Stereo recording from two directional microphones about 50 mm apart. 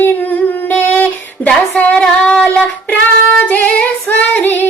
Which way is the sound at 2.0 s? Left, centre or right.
Centre.